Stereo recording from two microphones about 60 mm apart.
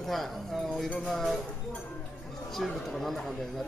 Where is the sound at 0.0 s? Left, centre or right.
Centre.